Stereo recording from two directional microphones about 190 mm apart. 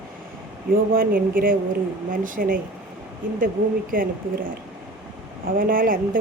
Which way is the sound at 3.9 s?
50° right (ahead or behind).